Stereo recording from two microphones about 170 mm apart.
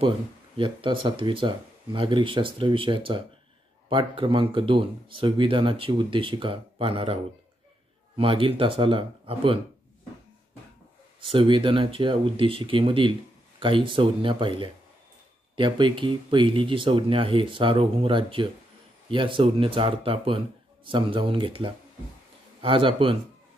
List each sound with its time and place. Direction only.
0.6 s speech: 30° right (ahead or behind)
8.2 s speech: 30° right (ahead or behind)
11.1 s speech: 30° right (ahead or behind)